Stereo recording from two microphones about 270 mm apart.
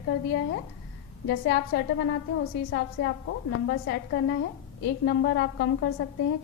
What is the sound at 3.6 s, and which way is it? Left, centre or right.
A woman's voice, left.